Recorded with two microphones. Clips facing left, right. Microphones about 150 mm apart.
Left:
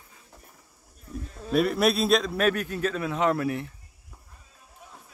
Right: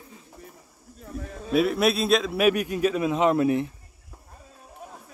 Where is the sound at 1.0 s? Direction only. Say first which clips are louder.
Right 3 dB; 90° right.